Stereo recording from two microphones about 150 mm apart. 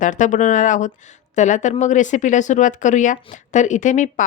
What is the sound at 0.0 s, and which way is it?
A woman's voice, 55° left (ahead or behind).